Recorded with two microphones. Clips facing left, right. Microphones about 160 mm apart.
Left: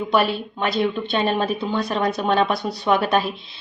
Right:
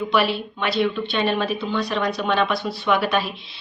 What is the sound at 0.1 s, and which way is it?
Speech, 45° left (ahead or behind).